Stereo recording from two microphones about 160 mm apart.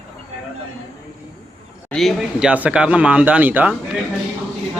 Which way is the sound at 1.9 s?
Centre (ahead or behind).